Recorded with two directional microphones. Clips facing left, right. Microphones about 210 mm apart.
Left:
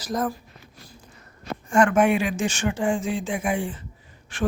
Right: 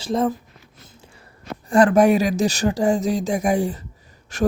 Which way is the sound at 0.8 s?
25° right (ahead or behind).